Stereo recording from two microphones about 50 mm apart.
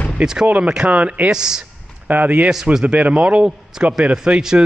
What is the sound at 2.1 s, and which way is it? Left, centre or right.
A man's voice, right.